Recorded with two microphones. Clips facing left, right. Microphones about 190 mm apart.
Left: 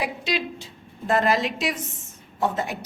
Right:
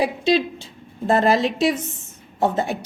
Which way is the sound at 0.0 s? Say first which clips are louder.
Right 8 dB; 30° right (ahead or behind).